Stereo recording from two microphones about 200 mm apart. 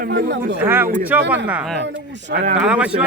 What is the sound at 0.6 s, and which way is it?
A man's voice, 10° right (ahead or behind).